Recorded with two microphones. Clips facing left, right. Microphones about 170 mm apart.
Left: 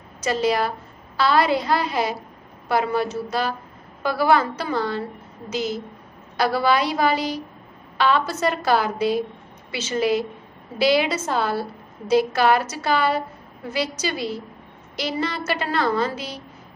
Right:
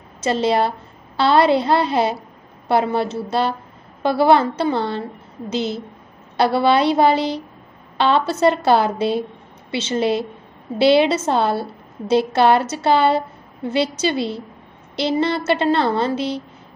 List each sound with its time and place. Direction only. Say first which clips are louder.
0.2 s a woman's voice: right 3 dB; 25° right (ahead or behind)